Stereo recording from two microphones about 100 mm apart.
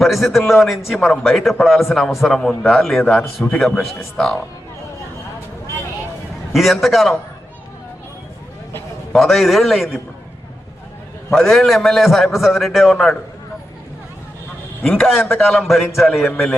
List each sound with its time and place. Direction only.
0.0 s a man's voice: centre (ahead or behind)
6.5 s a man's voice: centre (ahead or behind)
9.1 s a man's voice: centre (ahead or behind)
11.3 s a man's voice: 5° left (ahead or behind)
14.8 s a man's voice: 5° left (ahead or behind)